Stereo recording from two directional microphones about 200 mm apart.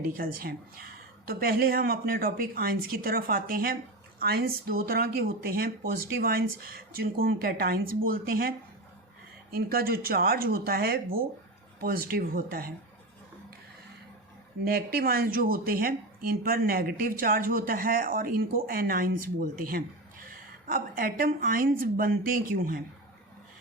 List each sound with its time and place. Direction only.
0.1 s speech: 45° right (ahead or behind)
14.6 s speech: 50° right (ahead or behind)